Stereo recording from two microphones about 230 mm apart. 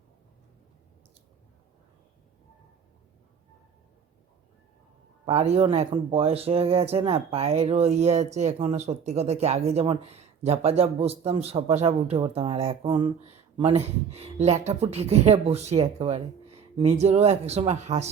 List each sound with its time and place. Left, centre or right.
5.2 s speech: right